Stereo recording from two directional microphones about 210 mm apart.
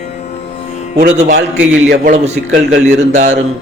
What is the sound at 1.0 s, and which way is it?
A man's voice, 35° right (ahead or behind).